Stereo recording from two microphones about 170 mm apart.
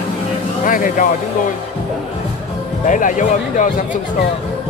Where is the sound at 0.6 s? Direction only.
50° left (ahead or behind).